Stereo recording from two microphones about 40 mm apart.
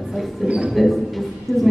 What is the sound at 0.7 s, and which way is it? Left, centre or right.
Speech, centre.